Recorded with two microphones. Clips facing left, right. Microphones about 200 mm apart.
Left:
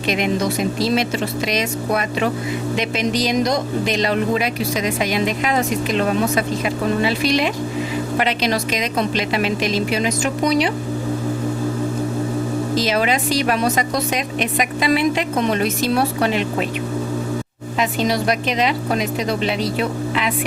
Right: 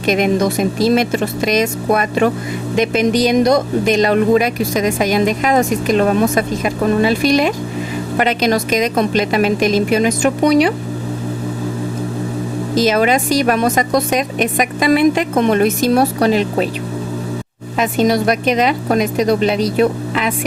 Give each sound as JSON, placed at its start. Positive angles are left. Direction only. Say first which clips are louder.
{"t": 0.0, "sound": "speech", "louder": "right 5 dB", "side_deg": -45}
{"t": 12.7, "sound": "speech", "louder": "right 7 dB", "side_deg": -45}
{"t": 17.7, "sound": "speech", "louder": "right 5 dB", "side_deg": -50}